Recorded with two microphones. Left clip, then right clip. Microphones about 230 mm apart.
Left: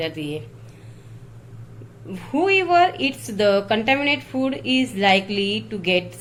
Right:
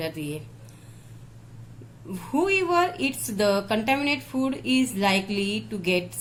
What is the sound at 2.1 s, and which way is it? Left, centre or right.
A woman's voice, right.